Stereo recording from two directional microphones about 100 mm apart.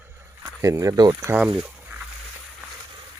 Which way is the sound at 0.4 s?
30° right (ahead or behind).